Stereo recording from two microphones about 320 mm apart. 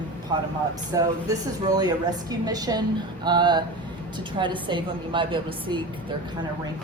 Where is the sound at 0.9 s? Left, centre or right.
Centre.